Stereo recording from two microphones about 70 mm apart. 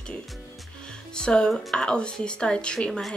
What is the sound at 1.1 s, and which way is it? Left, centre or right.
Speech, centre.